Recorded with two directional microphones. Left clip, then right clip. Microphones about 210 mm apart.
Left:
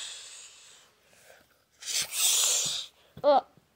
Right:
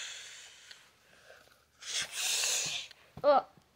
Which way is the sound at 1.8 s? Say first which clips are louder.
Left 6 dB; 20° left (ahead or behind).